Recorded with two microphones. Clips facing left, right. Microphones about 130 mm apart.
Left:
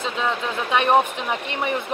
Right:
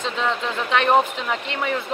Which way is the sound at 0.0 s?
10° left (ahead or behind).